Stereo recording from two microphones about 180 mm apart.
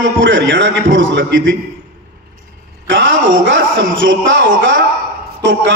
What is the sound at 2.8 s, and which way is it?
A man's voice, 90° right.